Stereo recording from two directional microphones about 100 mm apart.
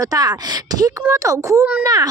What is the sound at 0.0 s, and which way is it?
Speech, 40° right (ahead or behind).